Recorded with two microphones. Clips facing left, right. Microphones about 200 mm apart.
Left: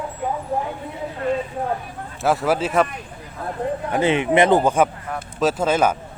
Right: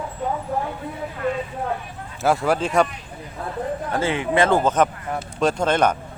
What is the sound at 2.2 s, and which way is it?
Speech, centre (ahead or behind).